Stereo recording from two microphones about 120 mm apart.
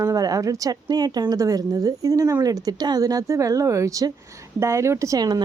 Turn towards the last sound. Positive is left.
turn(degrees=-35)  # may be behind; listen again after turning